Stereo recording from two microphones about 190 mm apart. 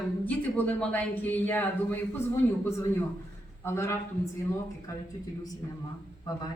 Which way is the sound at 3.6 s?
15° left (ahead or behind).